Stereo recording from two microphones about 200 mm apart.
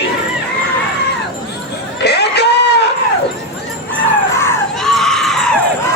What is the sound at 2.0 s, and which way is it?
Crowd, 55° left (ahead or behind).